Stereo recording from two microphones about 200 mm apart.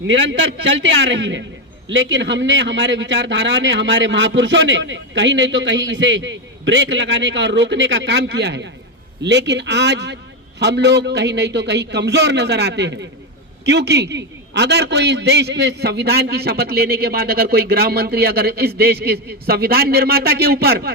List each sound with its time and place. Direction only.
0.1 s a man's voice: 65° right (ahead or behind); by 20.9 s 50° right (ahead or behind)